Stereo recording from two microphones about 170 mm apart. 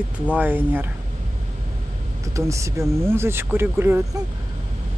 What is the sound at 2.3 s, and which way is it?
Speech, 15° right (ahead or behind).